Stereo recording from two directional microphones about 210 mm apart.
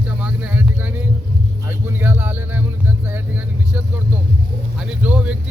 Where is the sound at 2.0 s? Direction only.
10° right (ahead or behind).